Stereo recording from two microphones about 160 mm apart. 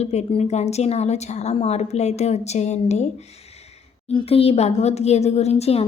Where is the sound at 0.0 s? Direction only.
45° left (ahead or behind).